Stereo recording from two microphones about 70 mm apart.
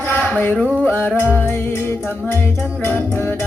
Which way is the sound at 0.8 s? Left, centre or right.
Left.